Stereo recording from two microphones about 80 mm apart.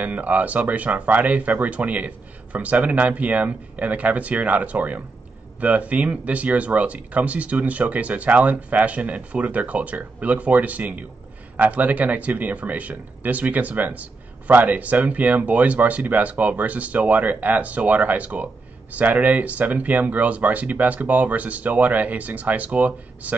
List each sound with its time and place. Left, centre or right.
0.0 s speech: centre